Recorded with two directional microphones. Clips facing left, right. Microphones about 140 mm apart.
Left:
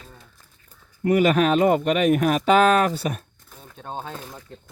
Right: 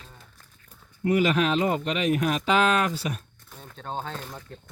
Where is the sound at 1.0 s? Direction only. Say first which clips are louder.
Left 4 dB; 50° left (ahead or behind).